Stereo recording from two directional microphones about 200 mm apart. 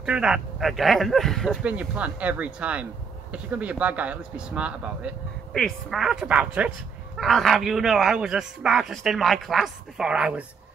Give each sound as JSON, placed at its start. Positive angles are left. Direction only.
{"t": 0.0, "sound": "speech", "side_deg": -5}